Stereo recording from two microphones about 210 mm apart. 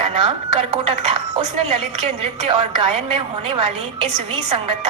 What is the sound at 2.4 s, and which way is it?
A woman's voice, 25° right (ahead or behind).